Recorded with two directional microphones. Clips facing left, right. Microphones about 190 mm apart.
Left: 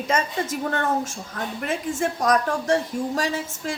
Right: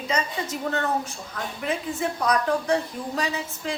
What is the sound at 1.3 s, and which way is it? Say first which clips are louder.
A woman's voice: even; 45° left (ahead or behind).